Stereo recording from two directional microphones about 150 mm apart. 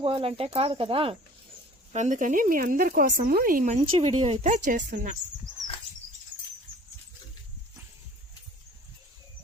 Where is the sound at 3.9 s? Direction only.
40° right (ahead or behind); by 5.0 s 60° right (ahead or behind).